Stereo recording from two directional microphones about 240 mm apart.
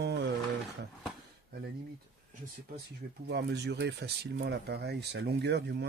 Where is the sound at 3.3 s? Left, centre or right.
Right.